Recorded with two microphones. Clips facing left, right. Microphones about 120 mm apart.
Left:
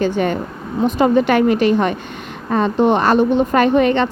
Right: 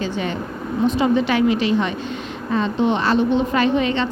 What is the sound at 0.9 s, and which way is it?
A woman's voice, 50° left (ahead or behind).